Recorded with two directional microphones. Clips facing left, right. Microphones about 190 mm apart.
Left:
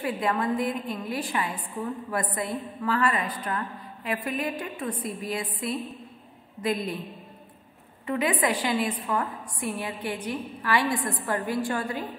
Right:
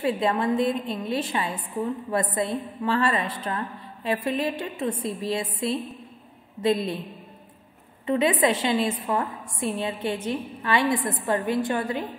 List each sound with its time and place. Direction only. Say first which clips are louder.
0.0 s a woman's voice: right 3 dB; 25° right (ahead or behind)
8.1 s a woman's voice: right 4 dB; 25° right (ahead or behind)